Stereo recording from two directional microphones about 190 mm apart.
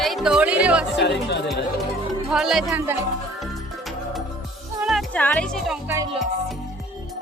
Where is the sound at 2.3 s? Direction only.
Centre (ahead or behind).